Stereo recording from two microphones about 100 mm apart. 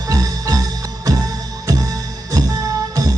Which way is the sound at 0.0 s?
35° right (ahead or behind).